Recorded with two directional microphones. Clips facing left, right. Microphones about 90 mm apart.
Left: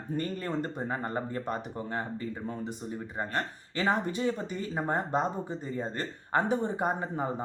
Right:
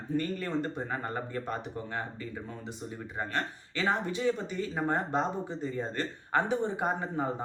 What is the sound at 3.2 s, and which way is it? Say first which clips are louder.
Speech: even; 35° left (ahead or behind).